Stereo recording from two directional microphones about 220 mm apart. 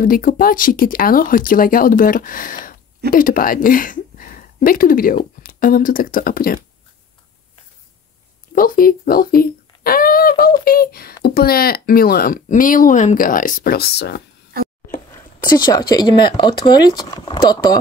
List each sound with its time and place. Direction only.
0.0 s speech: 40° left (ahead or behind)
8.5 s speech: 40° left (ahead or behind)
15.6 s speech: 20° left (ahead or behind)